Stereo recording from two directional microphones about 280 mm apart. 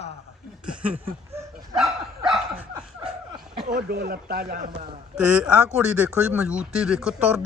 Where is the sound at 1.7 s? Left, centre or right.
Centre.